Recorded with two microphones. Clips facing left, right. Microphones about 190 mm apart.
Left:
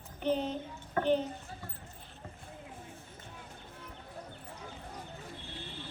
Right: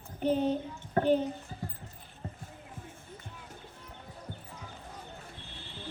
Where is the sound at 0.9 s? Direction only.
40° right (ahead or behind).